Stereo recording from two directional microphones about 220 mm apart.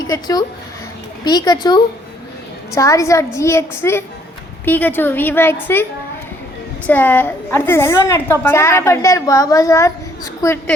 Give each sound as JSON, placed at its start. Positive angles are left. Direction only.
{"t": 0.1, "sound": "a woman's voice", "side_deg": 15}
{"t": 6.8, "sound": "a woman's voice", "side_deg": 10}